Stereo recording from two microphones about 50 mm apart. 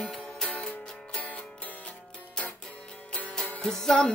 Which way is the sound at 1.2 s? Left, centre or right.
Left.